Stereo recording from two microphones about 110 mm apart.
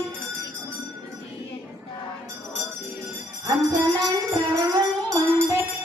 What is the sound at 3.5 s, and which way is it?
Music, 35° right (ahead or behind).